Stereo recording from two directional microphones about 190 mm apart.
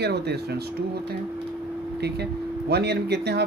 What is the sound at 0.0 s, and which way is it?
Speech, 60° right (ahead or behind).